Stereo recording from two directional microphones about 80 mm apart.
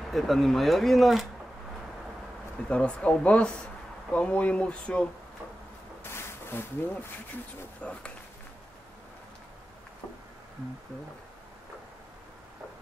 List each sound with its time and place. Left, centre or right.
0.1 s speech: centre
2.7 s speech: centre
6.0 s a sound: left
7.8 s speech: centre